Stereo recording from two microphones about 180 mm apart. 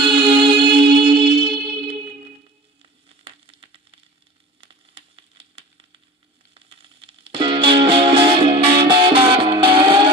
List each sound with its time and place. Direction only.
0.0 s music: 25° right (ahead or behind)
3.4 s a sound: 30° right (ahead or behind)
6.5 s music: 30° right (ahead or behind)